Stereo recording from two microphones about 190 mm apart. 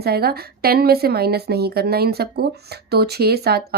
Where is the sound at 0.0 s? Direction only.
55° right (ahead or behind).